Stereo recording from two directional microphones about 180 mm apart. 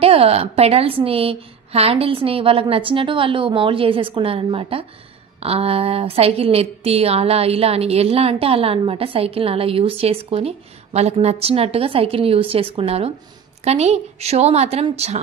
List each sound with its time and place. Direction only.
0.0 s a woman's voice: 35° right (ahead or behind)